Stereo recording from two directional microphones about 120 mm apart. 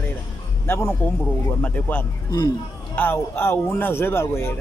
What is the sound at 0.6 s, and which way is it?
Speech, 20° left (ahead or behind).